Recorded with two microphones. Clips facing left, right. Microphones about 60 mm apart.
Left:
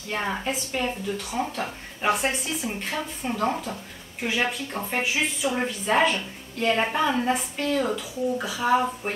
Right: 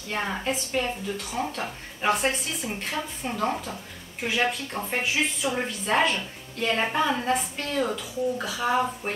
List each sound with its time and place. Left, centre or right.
0.1 s a woman's voice: centre